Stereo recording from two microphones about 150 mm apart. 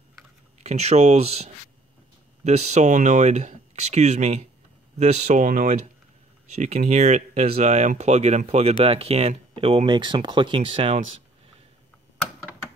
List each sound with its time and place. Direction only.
0.7 s speech: 45° right (ahead or behind); by 5.8 s 65° right (ahead or behind)
6.5 s speech: 50° right (ahead or behind)